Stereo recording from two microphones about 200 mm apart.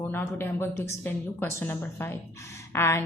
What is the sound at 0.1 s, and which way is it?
A woman's voice, 10° left (ahead or behind).